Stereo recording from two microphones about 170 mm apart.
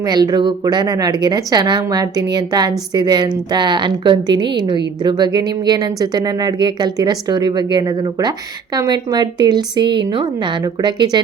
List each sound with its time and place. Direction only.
0.0 s speech: 20° right (ahead or behind)